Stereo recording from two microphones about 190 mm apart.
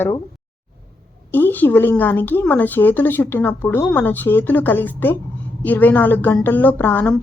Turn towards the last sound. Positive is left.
turn(degrees=10)  # may be behind; listen again after turning